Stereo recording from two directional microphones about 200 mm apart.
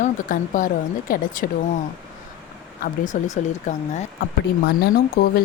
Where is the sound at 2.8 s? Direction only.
35° left (ahead or behind).